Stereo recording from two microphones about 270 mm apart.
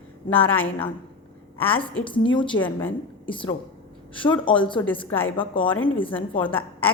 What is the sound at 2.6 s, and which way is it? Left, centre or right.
Speech, centre.